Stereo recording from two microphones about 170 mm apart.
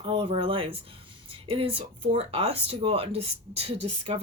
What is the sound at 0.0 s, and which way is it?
Speech, 30° right (ahead or behind).